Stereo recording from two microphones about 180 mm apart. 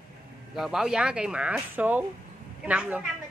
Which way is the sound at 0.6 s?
Centre (ahead or behind).